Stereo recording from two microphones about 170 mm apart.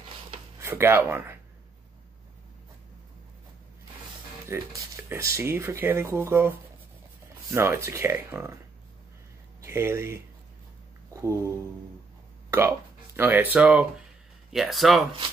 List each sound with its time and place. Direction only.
0.6 s speech: 15° right (ahead or behind)
4.5 s speech: 15° right (ahead or behind)
7.5 s speech: 15° right (ahead or behind)
9.6 s speech: 15° right (ahead or behind)
11.1 s a sound: 15° right (ahead or behind)
12.5 s speech: 15° right (ahead or behind)